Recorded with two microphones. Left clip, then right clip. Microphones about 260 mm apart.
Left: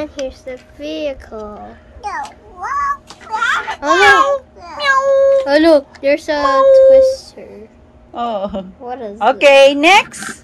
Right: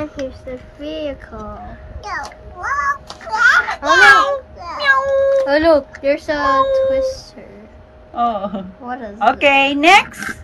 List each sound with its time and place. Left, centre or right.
0.8 s speech: left
2.0 s a sound: centre
5.5 s speech: left
8.1 s speech: centre
8.8 s speech: left
9.2 s speech: centre